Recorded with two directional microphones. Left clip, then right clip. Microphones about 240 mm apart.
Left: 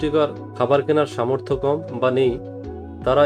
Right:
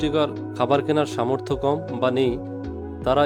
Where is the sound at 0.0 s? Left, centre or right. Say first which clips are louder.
Left 3 dB; right.